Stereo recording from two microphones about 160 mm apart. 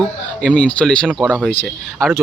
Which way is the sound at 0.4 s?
5° left (ahead or behind).